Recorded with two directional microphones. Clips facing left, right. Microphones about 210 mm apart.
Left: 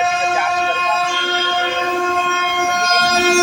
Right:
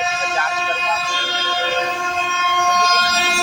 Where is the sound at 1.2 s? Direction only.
55° left (ahead or behind).